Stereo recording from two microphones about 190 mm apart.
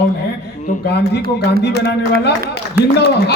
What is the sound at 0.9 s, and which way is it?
A man's voice, 60° left (ahead or behind).